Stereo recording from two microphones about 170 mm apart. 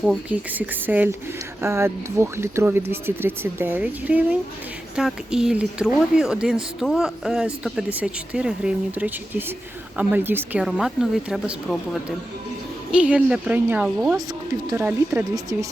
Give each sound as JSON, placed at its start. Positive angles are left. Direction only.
{"t": 0.0, "sound": "speech", "side_deg": -5}
{"t": 12.9, "sound": "speech", "side_deg": -5}